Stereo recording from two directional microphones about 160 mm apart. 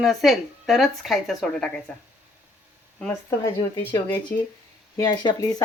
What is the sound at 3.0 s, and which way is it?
Speech, 15° left (ahead or behind).